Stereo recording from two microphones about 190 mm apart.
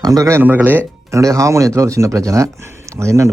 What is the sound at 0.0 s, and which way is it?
Speech, 20° right (ahead or behind).